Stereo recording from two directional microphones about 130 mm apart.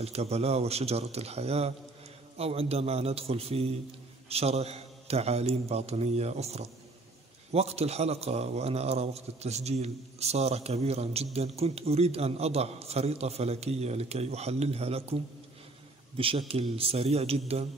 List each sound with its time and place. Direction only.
0.0 s a man's voice: 55° right (ahead or behind)
16.2 s a man's voice: 45° right (ahead or behind)